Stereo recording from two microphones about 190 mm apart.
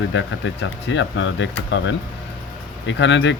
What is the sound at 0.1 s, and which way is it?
Speech, 75° left (ahead or behind).